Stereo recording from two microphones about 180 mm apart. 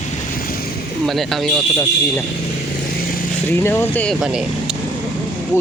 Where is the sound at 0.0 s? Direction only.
50° left (ahead or behind).